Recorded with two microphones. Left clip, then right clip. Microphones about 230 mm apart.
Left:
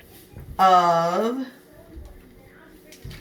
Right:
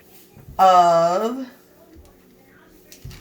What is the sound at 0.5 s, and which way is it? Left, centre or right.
Speech, right.